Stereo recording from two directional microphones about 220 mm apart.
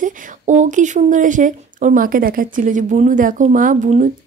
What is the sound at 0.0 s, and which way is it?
A woman's voice, 35° right (ahead or behind).